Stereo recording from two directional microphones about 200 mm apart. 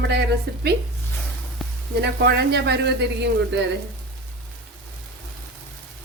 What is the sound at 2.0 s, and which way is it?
Speech, 55° right (ahead or behind).